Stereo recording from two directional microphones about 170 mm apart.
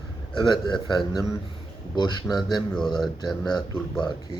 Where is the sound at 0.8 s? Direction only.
25° left (ahead or behind).